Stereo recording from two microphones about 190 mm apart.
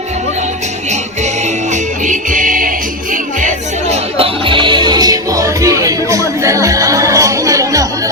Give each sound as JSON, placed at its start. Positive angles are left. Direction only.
{"t": 1.7, "sound": "music", "side_deg": -40}
{"t": 3.4, "sound": "music", "side_deg": -30}